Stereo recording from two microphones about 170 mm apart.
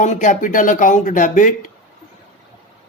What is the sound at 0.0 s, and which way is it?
Speech, 45° left (ahead or behind).